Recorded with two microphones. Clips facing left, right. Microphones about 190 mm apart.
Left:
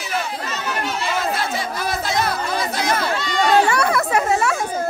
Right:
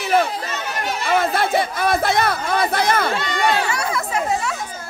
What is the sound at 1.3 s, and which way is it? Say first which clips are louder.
Chatter: right 4 dB; 60° right (ahead or behind).